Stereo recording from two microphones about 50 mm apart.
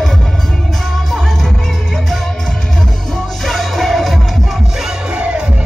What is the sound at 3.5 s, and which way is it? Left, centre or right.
Music, centre.